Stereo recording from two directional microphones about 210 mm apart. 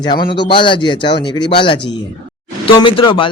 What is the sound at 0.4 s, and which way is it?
Speech, 25° left (ahead or behind).